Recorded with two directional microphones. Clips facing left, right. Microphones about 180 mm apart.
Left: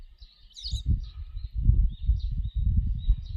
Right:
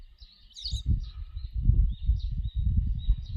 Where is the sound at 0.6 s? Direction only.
90° left.